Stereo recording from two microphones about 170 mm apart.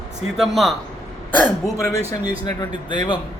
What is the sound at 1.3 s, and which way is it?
A man's voice, 15° left (ahead or behind).